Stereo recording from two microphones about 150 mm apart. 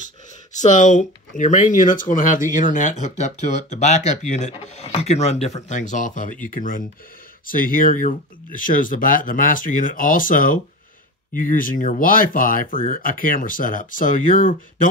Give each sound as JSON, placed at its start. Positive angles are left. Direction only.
{"t": 0.0, "sound": "speech", "side_deg": 55}